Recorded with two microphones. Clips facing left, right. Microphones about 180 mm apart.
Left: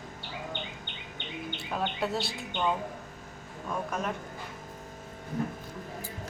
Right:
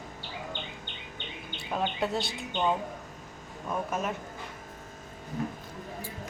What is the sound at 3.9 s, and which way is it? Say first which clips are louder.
Speech: right 1 dB; 5° right (ahead or behind).